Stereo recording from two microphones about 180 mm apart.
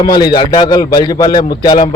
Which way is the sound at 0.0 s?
20° left (ahead or behind).